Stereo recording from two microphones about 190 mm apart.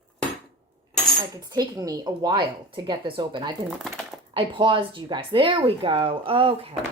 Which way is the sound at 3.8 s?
Centre (ahead or behind).